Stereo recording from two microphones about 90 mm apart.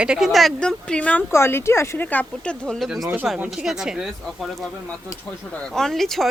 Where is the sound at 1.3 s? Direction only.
30° left (ahead or behind).